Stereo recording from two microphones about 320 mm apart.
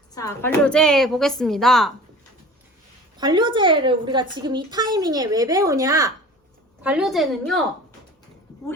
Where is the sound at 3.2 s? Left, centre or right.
Centre.